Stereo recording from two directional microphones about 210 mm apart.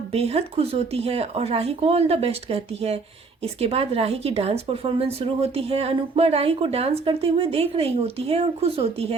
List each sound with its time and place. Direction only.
0.1 s speech: 30° right (ahead or behind)